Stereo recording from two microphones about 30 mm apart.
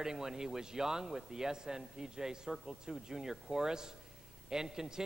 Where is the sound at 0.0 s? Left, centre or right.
Centre.